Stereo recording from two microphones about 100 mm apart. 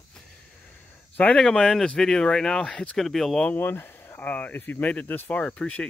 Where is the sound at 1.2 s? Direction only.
5° left (ahead or behind).